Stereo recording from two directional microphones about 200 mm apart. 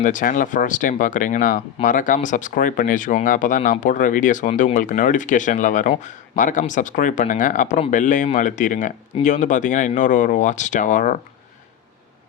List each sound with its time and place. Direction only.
0.0 s speech: 40° left (ahead or behind)